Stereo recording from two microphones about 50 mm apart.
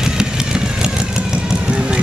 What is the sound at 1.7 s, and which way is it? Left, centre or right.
Run, centre.